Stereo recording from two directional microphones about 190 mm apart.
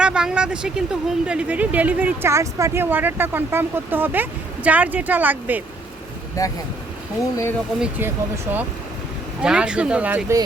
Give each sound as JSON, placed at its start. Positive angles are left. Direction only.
{"t": 0.0, "sound": "speech", "side_deg": -5}
{"t": 6.4, "sound": "speech", "side_deg": 15}
{"t": 7.8, "sound": "speech", "side_deg": -10}